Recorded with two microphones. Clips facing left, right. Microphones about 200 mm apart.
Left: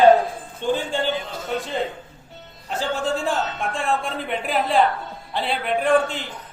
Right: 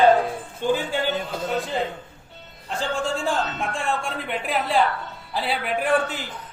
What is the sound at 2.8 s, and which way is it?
A man's voice, centre (ahead or behind).